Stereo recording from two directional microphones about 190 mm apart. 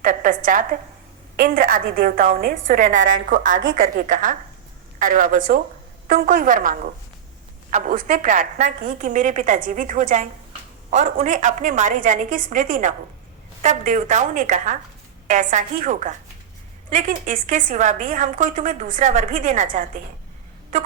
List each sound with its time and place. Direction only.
0.0 s a woman's voice: 45° right (ahead or behind)